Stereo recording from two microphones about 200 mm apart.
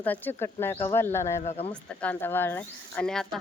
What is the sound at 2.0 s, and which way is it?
Speech, 10° left (ahead or behind).